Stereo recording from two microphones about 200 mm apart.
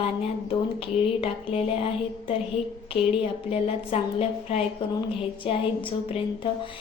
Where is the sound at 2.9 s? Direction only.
30° left (ahead or behind).